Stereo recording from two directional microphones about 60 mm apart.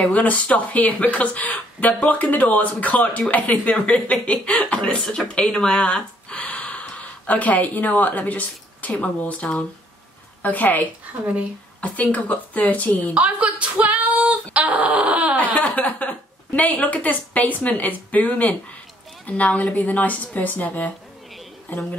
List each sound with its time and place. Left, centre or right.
0.0 s speech: left
13.1 s female singing: right
15.3 s a woman's voice: left